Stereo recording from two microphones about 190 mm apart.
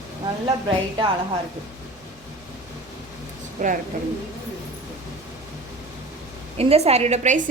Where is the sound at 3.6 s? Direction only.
40° right (ahead or behind).